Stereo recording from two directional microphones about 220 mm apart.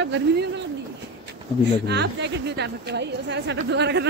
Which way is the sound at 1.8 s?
50° right (ahead or behind).